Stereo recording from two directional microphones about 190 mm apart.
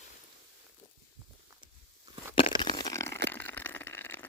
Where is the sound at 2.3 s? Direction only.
25° left (ahead or behind).